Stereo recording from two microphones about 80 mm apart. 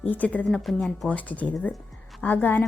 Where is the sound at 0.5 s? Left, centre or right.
Centre.